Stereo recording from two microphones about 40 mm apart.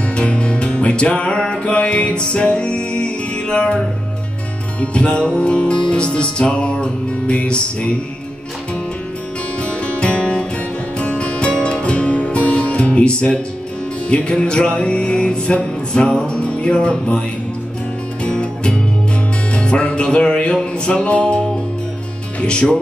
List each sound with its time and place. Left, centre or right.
0.1 s music: left
9.6 s music: left
18.2 s music: left